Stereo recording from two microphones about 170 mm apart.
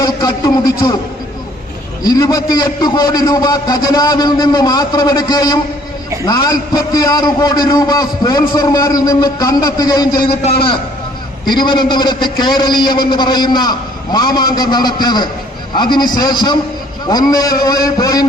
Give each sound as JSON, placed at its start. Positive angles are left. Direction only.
{"t": 0.0, "sound": "a man's voice", "side_deg": 20}
{"t": 2.0, "sound": "a man's voice", "side_deg": 20}
{"t": 11.4, "sound": "a man's voice", "side_deg": 25}